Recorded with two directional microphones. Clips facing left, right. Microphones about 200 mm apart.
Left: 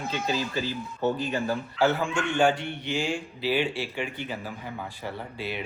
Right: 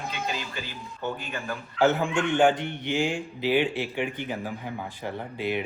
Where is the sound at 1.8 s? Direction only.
20° right (ahead or behind).